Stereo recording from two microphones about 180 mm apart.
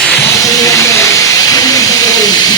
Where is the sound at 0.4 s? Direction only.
15° left (ahead or behind).